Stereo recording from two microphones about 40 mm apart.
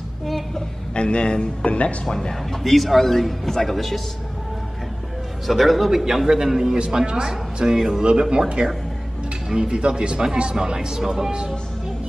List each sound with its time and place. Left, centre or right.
0.9 s speech: left
2.0 s a man's voice: centre
5.5 s a man's voice: centre